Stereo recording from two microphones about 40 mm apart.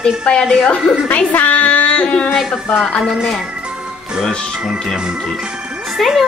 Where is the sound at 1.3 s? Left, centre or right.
Left.